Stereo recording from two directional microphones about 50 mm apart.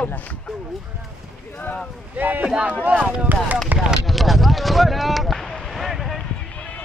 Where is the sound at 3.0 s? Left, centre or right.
Right.